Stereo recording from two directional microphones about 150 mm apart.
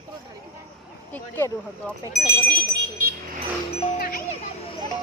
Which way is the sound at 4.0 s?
70° left (ahead or behind).